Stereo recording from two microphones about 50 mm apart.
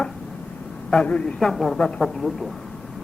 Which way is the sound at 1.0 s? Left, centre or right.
Left.